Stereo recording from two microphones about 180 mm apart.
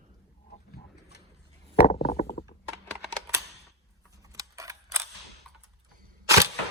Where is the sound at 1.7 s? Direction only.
35° left (ahead or behind).